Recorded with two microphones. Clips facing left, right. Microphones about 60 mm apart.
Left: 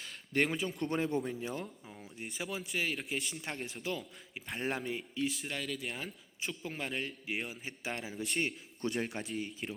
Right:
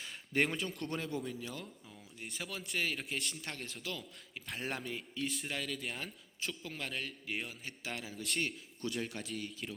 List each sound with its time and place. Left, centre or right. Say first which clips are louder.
0.0 s speech: left 1 dB; centre
0.9 s speech: left 7 dB; left
2.2 s speech: left 4 dB; centre
3.4 s speech: left 4 dB; centre
4.4 s speech: left 4 dB; centre
6.6 s a man's voice: left 6 dB; centre
8.8 s speech: left 4 dB; left
9.2 s speech: left 3 dB; centre